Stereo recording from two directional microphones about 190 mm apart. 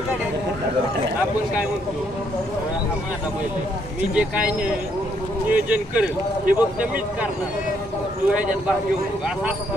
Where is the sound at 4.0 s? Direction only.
5° right (ahead or behind).